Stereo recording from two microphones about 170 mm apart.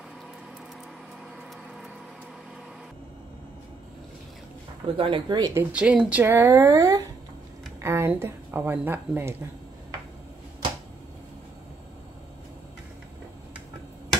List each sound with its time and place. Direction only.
4.8 s speech: 30° right (ahead or behind)
5.5 s speech: 10° right (ahead or behind)